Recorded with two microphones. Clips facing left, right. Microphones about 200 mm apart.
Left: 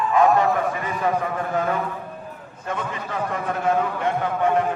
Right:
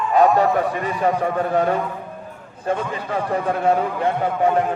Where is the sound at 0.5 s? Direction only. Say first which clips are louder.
Right 3 dB; 35° right (ahead or behind).